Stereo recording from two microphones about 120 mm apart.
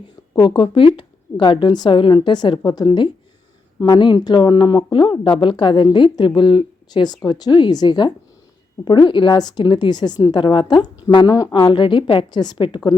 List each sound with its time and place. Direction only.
0.3 s speech: 40° left (ahead or behind)